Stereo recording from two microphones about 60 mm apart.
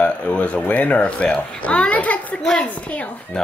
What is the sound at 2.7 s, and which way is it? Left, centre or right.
Speech, left.